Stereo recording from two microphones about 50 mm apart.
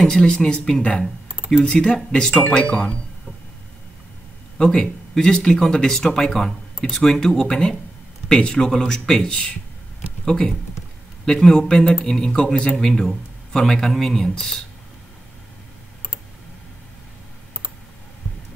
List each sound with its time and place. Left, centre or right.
0.2 s speech: centre
4.6 s speech: centre